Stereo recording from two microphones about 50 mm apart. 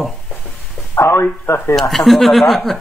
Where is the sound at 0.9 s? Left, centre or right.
Left.